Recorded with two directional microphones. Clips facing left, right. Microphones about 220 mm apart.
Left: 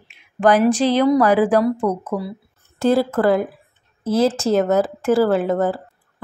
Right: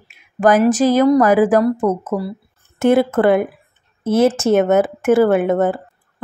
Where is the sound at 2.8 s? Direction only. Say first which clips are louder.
Right 3 dB; 20° right (ahead or behind).